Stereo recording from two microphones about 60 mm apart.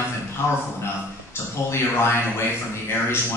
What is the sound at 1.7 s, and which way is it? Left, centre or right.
Speech, left.